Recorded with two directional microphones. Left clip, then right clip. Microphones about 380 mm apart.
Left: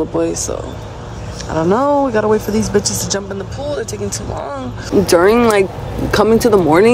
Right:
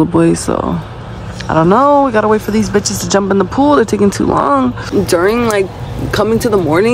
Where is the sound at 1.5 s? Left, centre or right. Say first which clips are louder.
Right 5 dB; centre.